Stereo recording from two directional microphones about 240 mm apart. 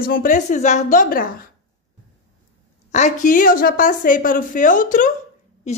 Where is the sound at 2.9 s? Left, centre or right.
Left.